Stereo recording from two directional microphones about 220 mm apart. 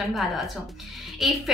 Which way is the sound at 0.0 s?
Centre (ahead or behind).